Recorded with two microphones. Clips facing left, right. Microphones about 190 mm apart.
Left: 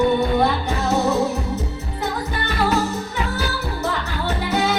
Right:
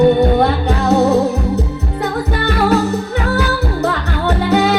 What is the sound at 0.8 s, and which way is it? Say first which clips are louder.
Music: right 7 dB; 65° right (ahead or behind).